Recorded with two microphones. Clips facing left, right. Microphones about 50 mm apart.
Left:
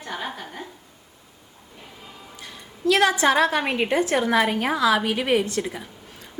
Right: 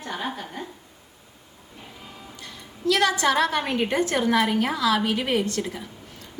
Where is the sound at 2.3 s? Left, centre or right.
Left.